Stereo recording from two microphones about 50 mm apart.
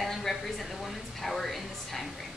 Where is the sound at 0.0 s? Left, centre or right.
Centre.